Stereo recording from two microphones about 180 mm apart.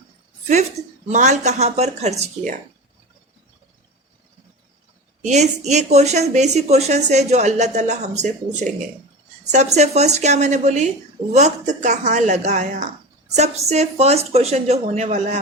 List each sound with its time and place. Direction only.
1.0 s a woman's voice: 40° right (ahead or behind)
5.2 s a woman's voice: 40° right (ahead or behind)